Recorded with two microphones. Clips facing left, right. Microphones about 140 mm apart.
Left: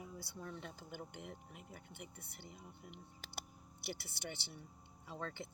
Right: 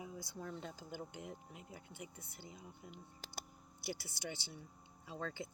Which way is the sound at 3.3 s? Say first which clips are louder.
Left 2 dB; 60° left (ahead or behind).